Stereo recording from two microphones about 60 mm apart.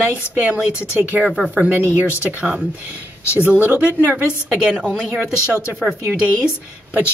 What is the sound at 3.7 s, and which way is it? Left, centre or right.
Speech, right.